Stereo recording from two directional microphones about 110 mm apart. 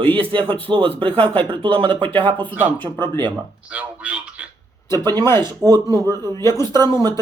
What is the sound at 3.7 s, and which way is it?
Speech, 10° right (ahead or behind).